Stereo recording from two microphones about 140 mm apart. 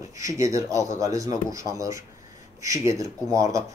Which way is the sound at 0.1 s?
25° right (ahead or behind).